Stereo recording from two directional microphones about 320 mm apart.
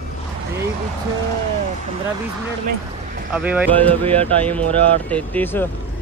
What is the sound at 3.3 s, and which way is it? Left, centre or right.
Speech, centre.